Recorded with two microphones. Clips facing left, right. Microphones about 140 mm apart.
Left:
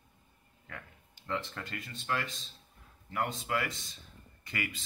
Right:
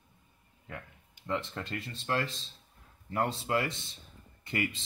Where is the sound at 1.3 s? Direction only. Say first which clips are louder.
Right 3 dB; 25° right (ahead or behind).